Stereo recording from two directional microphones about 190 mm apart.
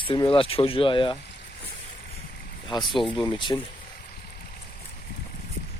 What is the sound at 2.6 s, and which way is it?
Speech, 25° left (ahead or behind).